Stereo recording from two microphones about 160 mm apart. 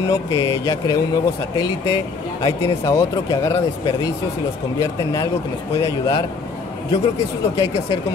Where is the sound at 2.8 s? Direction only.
20° left (ahead or behind).